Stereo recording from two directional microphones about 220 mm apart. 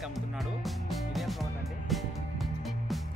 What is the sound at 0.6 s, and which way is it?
Music, centre (ahead or behind).